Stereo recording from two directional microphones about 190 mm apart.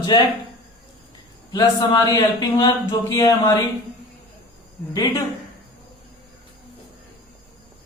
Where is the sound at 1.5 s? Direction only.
20° left (ahead or behind).